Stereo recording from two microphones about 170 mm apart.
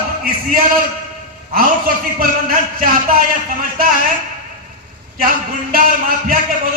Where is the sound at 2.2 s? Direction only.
60° right (ahead or behind).